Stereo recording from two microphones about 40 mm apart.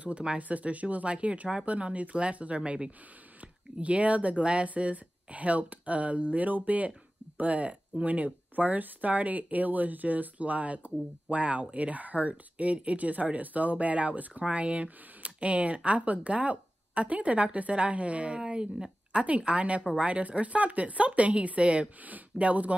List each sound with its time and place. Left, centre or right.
0.0 s speech: right